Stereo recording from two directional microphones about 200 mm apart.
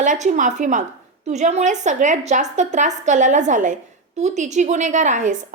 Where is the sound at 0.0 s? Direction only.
40° right (ahead or behind).